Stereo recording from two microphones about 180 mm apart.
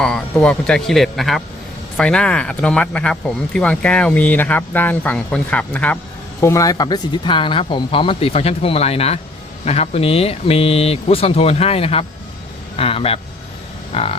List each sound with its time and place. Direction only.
0.0 s speech: 5° left (ahead or behind)
6.4 s a man's voice: 15° left (ahead or behind)